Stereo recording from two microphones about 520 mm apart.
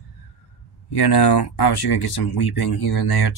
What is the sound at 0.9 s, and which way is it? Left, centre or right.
Speech, left.